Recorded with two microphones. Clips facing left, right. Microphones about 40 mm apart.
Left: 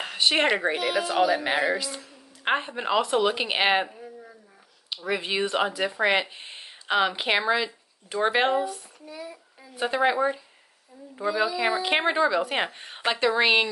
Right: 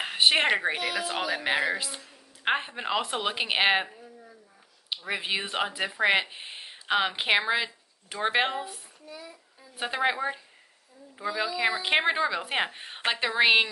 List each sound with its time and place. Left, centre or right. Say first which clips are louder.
0.0 s a sound: right 1 dB; centre
0.4 s a woman's voice: left 2 dB; centre
9.8 s a woman's voice: left 4 dB; centre